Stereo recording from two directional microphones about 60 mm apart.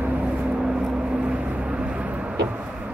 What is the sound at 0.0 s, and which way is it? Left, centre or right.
Vehicle, right.